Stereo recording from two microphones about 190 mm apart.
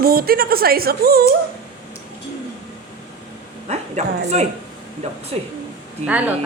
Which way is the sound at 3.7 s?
35° right (ahead or behind).